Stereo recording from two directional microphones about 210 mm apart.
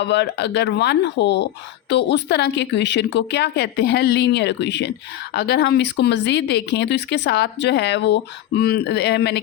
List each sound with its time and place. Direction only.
0.0 s a woman's voice: 55° left (ahead or behind)